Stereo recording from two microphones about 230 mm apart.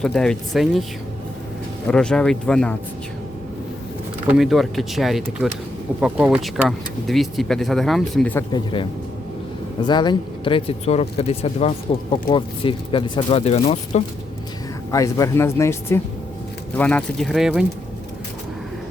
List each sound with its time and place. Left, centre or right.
0.0 s speech: centre
1.9 s speech: centre
4.3 s speech: centre
9.8 s speech: centre
14.8 s speech: centre